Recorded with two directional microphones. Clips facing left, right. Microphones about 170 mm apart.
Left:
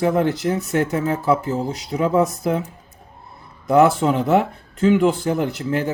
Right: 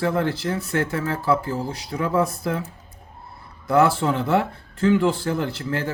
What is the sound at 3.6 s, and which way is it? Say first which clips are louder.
Speech: left 4 dB; 20° left (ahead or behind).